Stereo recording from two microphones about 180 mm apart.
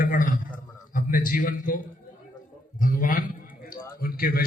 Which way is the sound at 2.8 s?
50° left (ahead or behind).